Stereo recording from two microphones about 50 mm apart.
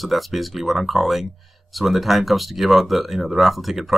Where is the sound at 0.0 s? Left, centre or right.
Centre.